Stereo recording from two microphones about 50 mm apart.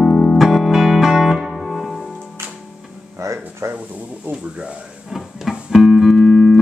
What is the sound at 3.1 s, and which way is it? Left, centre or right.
Music, right.